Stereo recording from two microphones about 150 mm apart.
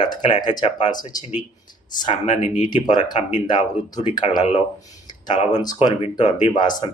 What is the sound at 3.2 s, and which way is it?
Speech, 50° left (ahead or behind).